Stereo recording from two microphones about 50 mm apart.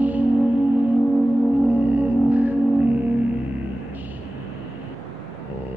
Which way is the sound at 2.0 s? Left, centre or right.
Right.